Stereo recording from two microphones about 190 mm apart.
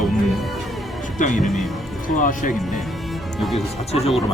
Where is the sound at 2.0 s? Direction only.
45° left (ahead or behind).